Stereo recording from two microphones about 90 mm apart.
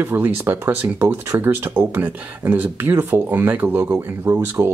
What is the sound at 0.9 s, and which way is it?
Speech, 30° right (ahead or behind).